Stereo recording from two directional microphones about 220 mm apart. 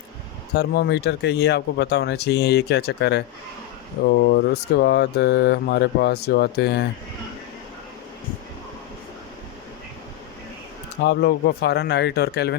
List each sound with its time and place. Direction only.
0.5 s speech: 50° left (ahead or behind)
11.0 s speech: 50° left (ahead or behind)